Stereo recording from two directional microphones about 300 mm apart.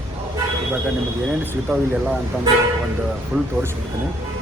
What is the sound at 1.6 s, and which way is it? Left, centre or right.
Speech, centre.